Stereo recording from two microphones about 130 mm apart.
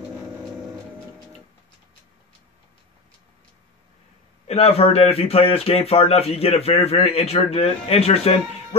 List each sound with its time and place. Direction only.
4.5 s speech: 50° left (ahead or behind)